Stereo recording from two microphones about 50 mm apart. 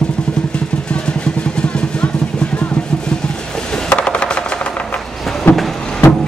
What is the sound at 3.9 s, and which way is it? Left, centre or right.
Machine gun, left.